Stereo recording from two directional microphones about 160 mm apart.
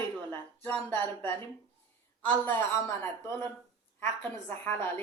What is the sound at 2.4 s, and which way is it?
A woman's voice, 15° left (ahead or behind).